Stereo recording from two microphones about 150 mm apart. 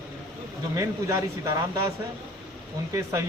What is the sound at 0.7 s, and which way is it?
Speech, 20° right (ahead or behind).